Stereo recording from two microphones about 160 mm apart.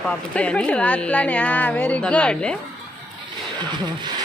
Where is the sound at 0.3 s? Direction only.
10° left (ahead or behind).